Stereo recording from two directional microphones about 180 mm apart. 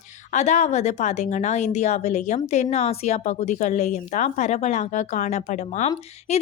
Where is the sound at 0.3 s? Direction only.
40° left (ahead or behind).